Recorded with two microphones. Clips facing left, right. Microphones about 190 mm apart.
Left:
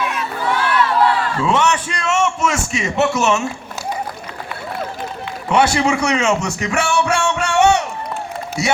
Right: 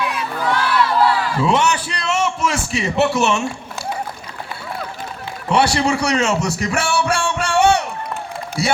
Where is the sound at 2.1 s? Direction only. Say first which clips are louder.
Left 2 dB; 35° right (ahead or behind).